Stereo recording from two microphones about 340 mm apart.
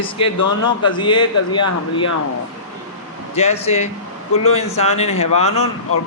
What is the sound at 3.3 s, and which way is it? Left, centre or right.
A man's voice, centre.